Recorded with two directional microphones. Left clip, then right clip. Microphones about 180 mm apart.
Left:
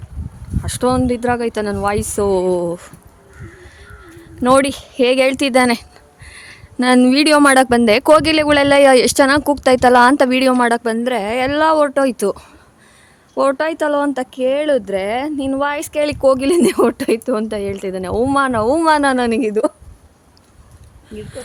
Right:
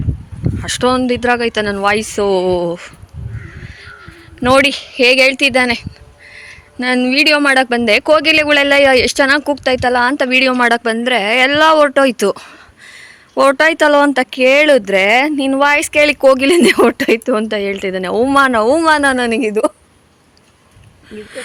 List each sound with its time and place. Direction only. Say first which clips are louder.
0.6 s speech: right 3 dB; centre (ahead or behind)
4.4 s speech: right 2 dB; 10° left (ahead or behind)
10.6 s speech: right 3 dB; 10° left (ahead or behind); by 18.8 s 10° right (ahead or behind)
18.8 s speech: right 2 dB; 5° left (ahead or behind)
21.1 s speech: right 2 dB; 10° right (ahead or behind)